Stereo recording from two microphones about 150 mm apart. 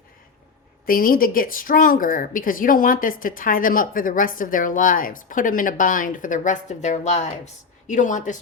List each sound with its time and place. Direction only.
0.9 s speech: 70° left (ahead or behind)